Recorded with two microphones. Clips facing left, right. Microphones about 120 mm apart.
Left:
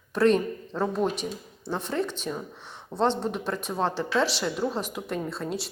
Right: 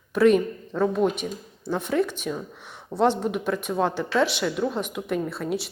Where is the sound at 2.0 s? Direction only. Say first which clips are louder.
Right 3 dB; 30° left (ahead or behind).